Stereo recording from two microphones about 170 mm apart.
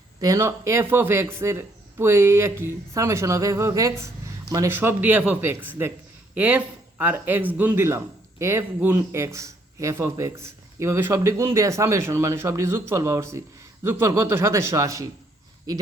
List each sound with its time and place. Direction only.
0.2 s a man's voice: 20° right (ahead or behind)